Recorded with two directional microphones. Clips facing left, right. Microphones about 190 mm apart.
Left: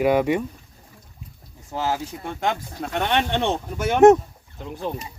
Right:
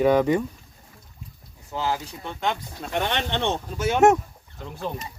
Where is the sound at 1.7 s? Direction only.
45° left (ahead or behind).